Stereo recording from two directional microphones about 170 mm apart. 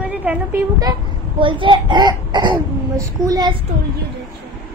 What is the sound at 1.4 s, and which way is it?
A child's voice, 30° right (ahead or behind).